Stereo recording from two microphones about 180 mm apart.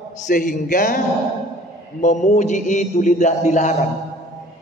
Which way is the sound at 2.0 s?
40° left (ahead or behind).